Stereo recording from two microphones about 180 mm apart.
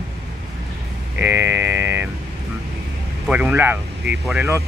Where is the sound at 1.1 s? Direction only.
15° right (ahead or behind).